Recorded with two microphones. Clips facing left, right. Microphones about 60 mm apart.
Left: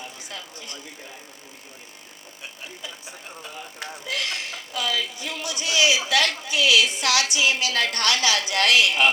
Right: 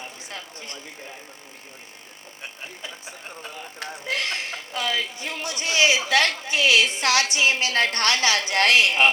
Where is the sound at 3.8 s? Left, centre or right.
Right.